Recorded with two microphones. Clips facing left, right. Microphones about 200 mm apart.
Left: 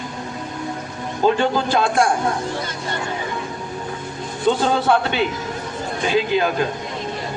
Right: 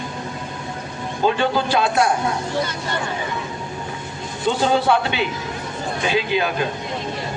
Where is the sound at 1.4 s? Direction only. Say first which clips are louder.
Left 1 dB; 45° left (ahead or behind).